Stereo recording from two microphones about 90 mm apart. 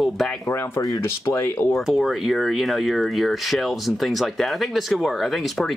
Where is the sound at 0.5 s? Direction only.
30° left (ahead or behind).